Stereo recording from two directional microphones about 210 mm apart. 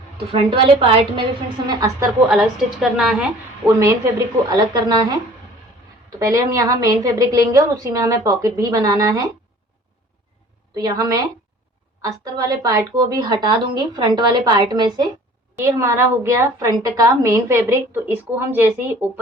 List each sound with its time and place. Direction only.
0.3 s a woman's voice: 25° right (ahead or behind)
2.3 s a woman's voice: centre (ahead or behind)
3.8 s a woman's voice: 15° right (ahead or behind)
6.1 s a woman's voice: 15° right (ahead or behind)
10.8 s a woman's voice: 20° right (ahead or behind)